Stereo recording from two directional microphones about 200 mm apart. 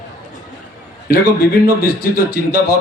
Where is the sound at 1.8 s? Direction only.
50° left (ahead or behind).